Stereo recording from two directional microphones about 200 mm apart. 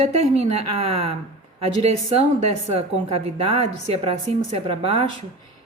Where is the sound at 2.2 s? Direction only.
30° right (ahead or behind).